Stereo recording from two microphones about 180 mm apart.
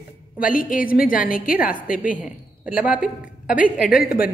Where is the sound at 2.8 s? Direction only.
5° right (ahead or behind).